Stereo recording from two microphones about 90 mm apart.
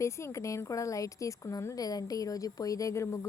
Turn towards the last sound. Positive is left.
turn(degrees=35)  # may be behind; listen again after turning